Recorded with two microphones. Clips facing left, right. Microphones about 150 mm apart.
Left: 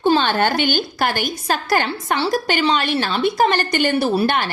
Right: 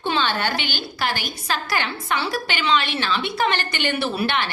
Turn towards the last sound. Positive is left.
turn(degrees=45)  # may be behind; listen again after turning